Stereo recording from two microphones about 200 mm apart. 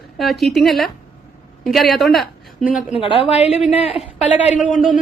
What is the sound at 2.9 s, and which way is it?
Speech, 25° left (ahead or behind).